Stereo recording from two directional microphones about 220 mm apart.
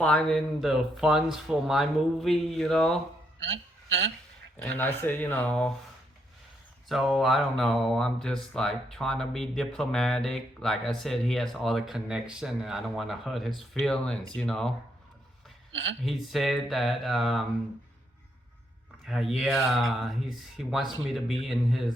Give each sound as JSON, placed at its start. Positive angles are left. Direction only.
{"t": 0.0, "sound": "speech", "side_deg": 5}
{"t": 3.4, "sound": "a man's voice", "side_deg": -60}
{"t": 4.6, "sound": "speech", "side_deg": 10}
{"t": 6.8, "sound": "speech", "side_deg": 0}
{"t": 15.7, "sound": "speech", "side_deg": -60}
{"t": 16.0, "sound": "speech", "side_deg": 0}
{"t": 19.0, "sound": "speech", "side_deg": 0}